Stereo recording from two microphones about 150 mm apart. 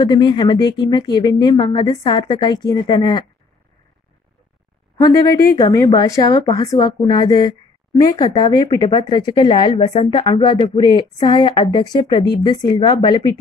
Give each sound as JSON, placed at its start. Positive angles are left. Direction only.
{"t": 0.0, "sound": "speech", "side_deg": 30}
{"t": 5.0, "sound": "a woman's voice", "side_deg": 20}